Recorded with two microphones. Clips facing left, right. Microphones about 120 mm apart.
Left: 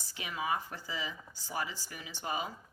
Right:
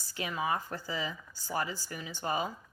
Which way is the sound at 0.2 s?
40° right (ahead or behind).